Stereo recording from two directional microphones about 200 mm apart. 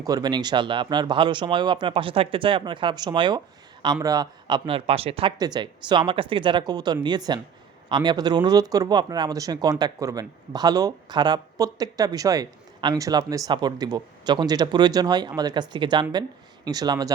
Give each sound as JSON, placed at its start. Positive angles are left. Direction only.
{"t": 0.0, "sound": "speech", "side_deg": -20}